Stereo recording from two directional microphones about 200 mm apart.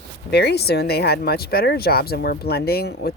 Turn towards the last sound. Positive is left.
turn(degrees=50)  # may be behind; listen again after turning